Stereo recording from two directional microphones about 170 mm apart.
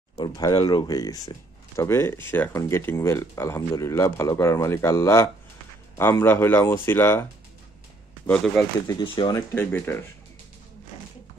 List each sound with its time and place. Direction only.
0.2 s speech: 25° left (ahead or behind)
8.8 s speech: 30° left (ahead or behind)
9.5 s speech: 15° left (ahead or behind)